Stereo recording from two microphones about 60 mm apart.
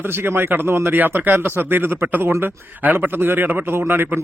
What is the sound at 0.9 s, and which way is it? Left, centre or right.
A man's voice, right.